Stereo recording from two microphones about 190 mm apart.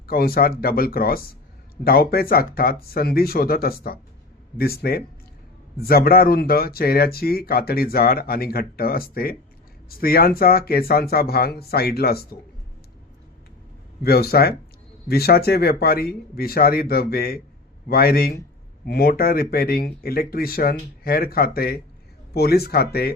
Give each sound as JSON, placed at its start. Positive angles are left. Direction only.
{"t": 0.1, "sound": "speech", "side_deg": 50}
{"t": 14.0, "sound": "speech", "side_deg": 55}